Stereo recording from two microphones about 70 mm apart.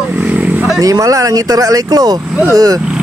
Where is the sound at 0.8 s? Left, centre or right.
Right.